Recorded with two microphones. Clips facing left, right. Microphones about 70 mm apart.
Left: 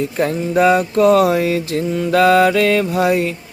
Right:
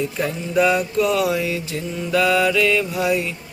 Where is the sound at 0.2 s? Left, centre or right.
Left.